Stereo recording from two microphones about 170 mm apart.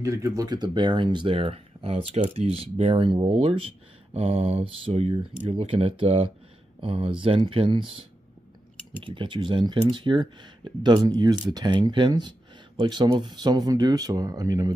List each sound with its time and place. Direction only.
0.0 s speech: 20° right (ahead or behind)
9.0 s speech: 30° right (ahead or behind)